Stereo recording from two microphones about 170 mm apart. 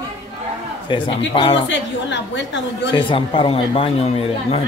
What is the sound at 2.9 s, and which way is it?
Speech, 30° left (ahead or behind).